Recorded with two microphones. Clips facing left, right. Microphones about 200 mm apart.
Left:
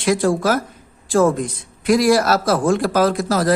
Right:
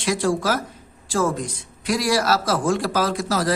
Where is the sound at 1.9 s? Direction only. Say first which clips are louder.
Left 6 dB; 55° left (ahead or behind).